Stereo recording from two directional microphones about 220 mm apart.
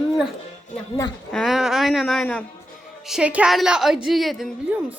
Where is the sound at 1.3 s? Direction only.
Centre (ahead or behind).